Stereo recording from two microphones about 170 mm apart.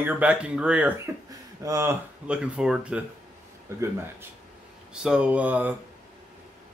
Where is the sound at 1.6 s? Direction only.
20° right (ahead or behind).